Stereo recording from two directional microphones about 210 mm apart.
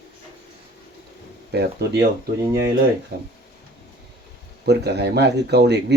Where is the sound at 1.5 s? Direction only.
50° right (ahead or behind).